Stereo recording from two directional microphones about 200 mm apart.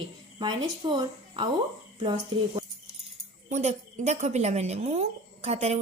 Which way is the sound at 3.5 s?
35° right (ahead or behind).